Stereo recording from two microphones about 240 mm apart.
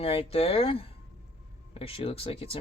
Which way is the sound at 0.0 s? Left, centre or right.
Left.